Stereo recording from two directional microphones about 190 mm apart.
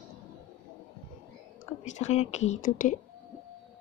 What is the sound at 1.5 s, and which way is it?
Speech, 40° left (ahead or behind).